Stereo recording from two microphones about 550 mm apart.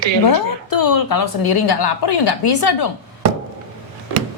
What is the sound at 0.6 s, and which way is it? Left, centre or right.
A woman's voice, left.